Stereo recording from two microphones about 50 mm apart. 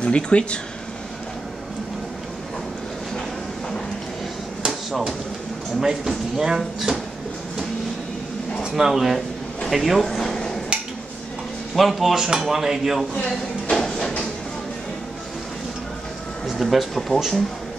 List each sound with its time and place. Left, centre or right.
0.0 s speech: left
5.8 s speech: centre
8.6 s speech: centre
10.0 s a sound: centre
11.7 s speech: centre
13.7 s a sound: centre
16.5 s speech: centre